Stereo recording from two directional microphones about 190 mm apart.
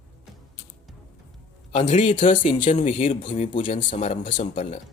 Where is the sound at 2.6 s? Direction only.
40° left (ahead or behind).